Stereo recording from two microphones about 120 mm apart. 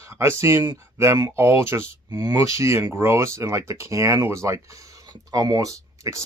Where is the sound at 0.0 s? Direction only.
25° right (ahead or behind).